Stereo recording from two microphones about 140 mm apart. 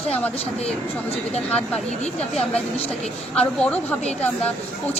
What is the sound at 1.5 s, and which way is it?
Speech, 10° left (ahead or behind).